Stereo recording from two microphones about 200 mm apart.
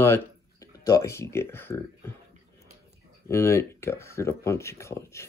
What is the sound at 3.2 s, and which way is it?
Speech, 15° left (ahead or behind).